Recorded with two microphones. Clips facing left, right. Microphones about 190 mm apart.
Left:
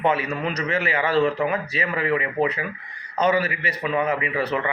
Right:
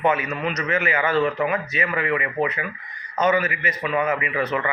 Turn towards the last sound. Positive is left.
turn(degrees=30)  # may be behind; listen again after turning